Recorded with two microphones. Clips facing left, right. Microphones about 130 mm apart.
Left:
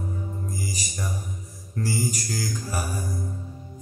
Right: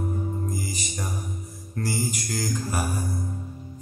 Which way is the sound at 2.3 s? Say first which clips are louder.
Right 2 dB; 50° right (ahead or behind).